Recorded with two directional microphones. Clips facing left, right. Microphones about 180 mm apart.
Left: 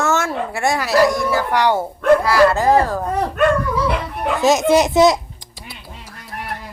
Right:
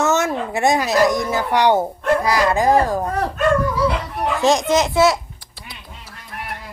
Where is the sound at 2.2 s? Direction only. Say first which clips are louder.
Left 3 dB; 15° right (ahead or behind).